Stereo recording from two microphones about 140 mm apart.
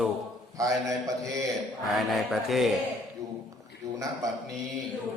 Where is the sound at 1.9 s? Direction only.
Centre (ahead or behind).